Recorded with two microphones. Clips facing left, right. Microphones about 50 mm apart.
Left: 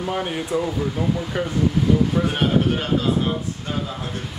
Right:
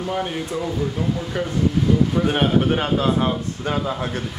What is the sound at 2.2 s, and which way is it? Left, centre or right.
Speech, centre.